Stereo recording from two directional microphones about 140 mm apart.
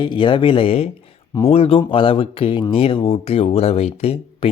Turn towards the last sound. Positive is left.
turn(degrees=45)  # may be behind; listen again after turning